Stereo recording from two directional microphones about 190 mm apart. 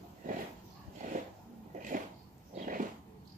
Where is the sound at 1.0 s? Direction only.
45° right (ahead or behind).